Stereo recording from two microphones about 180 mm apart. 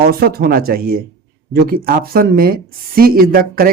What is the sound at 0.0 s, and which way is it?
Speech, 60° right (ahead or behind).